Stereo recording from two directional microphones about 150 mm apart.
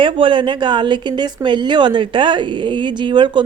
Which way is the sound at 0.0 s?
35° right (ahead or behind).